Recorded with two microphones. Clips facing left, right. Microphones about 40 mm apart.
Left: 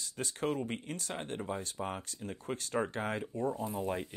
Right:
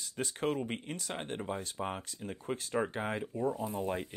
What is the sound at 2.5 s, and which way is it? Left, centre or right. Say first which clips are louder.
Speech: right 1 dB; centre.